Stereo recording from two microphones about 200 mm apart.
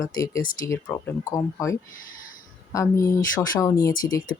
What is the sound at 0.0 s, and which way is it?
Speech, 15° left (ahead or behind).